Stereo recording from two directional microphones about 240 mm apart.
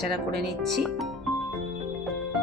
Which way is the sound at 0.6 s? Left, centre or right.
Centre.